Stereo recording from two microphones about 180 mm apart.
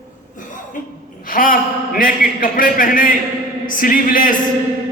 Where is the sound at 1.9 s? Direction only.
50° left (ahead or behind).